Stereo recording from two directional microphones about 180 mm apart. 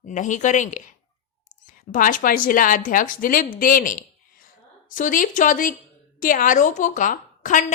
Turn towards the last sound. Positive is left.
turn(degrees=45)  # may be behind; listen again after turning